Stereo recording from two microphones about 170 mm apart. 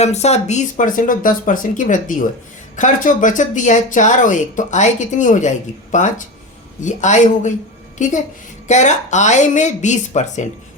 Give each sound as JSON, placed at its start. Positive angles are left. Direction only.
{"t": 0.0, "sound": "a woman's voice", "side_deg": 40}